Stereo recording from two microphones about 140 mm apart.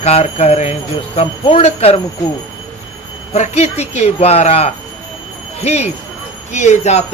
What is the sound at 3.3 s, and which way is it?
Speech, 50° left (ahead or behind).